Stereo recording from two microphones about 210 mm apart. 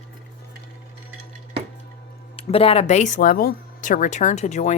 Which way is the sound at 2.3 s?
25° left (ahead or behind).